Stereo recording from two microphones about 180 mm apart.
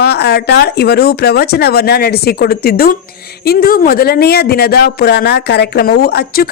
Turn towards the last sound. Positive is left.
turn(degrees=60)  # may be behind; listen again after turning